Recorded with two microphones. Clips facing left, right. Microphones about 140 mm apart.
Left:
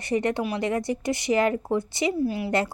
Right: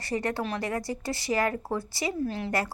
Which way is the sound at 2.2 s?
10° left (ahead or behind).